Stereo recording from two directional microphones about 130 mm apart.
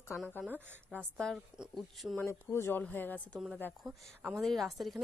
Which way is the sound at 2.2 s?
20° left (ahead or behind).